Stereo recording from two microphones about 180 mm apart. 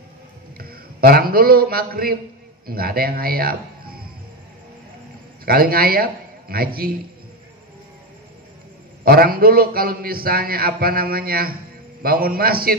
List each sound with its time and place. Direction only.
0.6 s a man's voice: 55° right (ahead or behind)
5.4 s a man's voice: 55° right (ahead or behind)
9.0 s a man's voice: 55° right (ahead or behind)